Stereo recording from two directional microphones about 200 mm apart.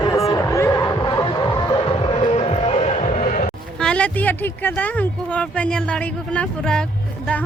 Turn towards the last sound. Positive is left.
turn(degrees=5)  # may be behind; listen again after turning